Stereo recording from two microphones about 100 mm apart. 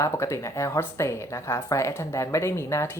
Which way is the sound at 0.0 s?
30° left (ahead or behind).